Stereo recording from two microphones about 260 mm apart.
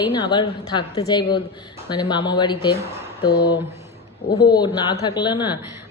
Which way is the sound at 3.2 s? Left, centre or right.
Left.